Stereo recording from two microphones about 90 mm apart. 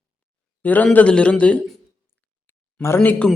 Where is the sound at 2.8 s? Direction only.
25° left (ahead or behind).